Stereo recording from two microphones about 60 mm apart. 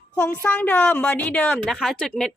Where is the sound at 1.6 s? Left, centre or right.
Centre.